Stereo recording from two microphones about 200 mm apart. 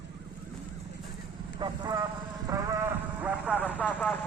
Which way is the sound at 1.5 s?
20° right (ahead or behind).